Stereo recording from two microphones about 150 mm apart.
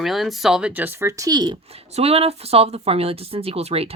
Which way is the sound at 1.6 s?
40° right (ahead or behind).